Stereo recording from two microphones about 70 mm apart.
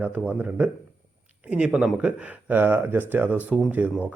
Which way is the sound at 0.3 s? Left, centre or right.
Right.